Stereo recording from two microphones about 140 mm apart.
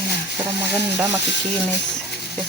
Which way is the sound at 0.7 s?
15° right (ahead or behind).